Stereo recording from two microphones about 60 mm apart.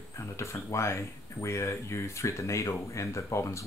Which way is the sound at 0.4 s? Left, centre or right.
Left.